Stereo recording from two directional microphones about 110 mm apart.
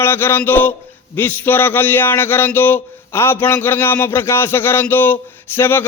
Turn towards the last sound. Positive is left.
turn(degrees=20)  # may be behind; listen again after turning